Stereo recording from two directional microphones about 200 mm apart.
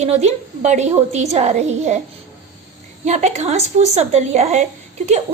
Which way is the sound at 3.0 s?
35° right (ahead or behind).